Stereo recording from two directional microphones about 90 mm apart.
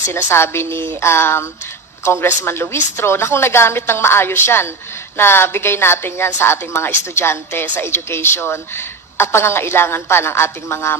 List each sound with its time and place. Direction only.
0.1 s a woman's voice: 25° left (ahead or behind)
0.7 s music: 65° right (ahead or behind)
1.0 s a woman's voice: 25° left (ahead or behind)